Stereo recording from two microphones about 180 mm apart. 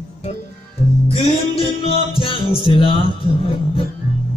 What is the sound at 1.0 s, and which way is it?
Music, 35° left (ahead or behind).